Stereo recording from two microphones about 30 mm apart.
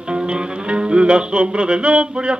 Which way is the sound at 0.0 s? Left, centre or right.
Right.